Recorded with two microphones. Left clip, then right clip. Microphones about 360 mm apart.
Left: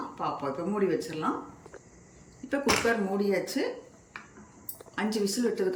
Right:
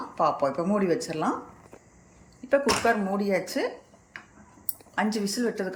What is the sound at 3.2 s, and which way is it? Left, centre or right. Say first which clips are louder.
Speech: right 2 dB; centre.